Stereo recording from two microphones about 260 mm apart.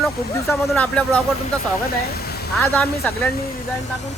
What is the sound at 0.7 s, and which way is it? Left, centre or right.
Speech, centre.